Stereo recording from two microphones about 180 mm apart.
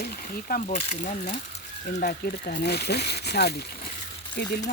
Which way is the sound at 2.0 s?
55° left (ahead or behind).